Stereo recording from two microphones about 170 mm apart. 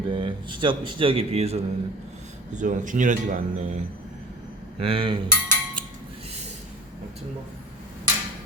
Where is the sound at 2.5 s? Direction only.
45° right (ahead or behind).